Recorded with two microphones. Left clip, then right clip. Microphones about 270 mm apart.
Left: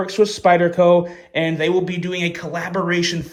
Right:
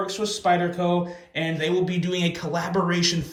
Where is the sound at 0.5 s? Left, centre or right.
Left.